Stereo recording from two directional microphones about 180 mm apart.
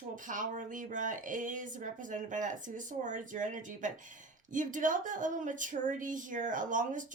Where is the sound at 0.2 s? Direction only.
45° right (ahead or behind).